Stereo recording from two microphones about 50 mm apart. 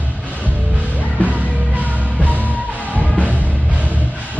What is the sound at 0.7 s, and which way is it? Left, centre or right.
Music, right.